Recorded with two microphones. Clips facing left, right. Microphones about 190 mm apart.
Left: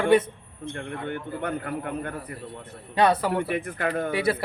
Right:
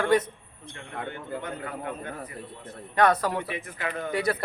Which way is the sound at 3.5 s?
55° left (ahead or behind).